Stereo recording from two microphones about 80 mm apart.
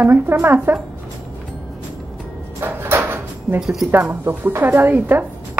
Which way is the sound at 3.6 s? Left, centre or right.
Centre.